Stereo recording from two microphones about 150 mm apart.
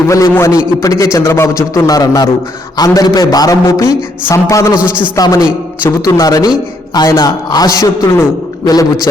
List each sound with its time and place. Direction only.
0.1 s a man's voice: 20° left (ahead or behind)